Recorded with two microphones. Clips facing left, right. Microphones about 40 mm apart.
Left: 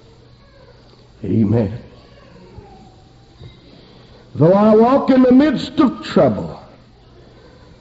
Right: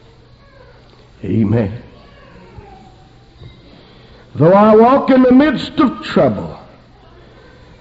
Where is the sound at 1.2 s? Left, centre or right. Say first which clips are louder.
Right 1 dB; right.